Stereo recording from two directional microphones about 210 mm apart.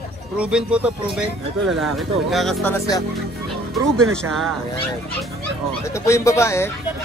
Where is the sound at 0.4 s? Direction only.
5° right (ahead or behind).